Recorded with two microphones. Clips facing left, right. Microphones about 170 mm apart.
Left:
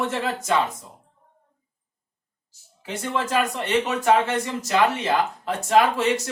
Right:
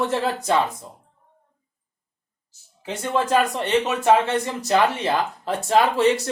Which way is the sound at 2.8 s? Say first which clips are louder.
Right 3 dB; 30° right (ahead or behind).